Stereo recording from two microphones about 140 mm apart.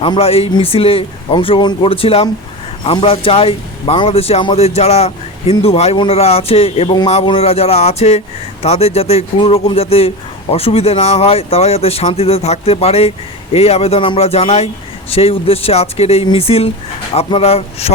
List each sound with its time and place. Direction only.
0.0 s speech: 40° left (ahead or behind)